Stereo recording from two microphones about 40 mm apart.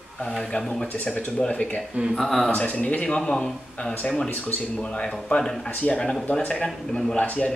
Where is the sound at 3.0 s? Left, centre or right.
Centre.